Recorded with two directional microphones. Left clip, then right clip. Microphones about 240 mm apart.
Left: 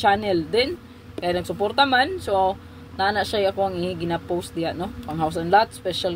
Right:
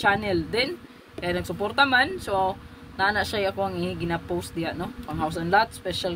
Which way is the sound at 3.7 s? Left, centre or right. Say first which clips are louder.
Left 3 dB; right.